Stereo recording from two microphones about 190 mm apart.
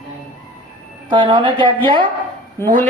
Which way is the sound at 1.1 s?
25° right (ahead or behind).